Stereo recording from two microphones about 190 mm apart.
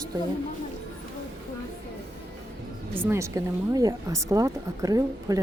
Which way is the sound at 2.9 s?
15° right (ahead or behind).